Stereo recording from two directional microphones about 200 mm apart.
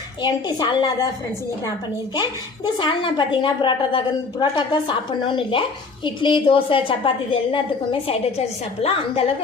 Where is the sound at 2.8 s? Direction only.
25° left (ahead or behind).